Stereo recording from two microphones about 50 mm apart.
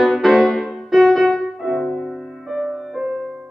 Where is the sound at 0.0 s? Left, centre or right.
Centre.